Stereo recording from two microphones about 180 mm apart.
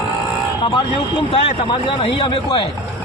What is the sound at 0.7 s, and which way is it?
Speech, 25° left (ahead or behind).